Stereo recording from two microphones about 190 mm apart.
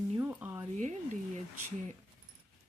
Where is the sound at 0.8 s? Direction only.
40° right (ahead or behind).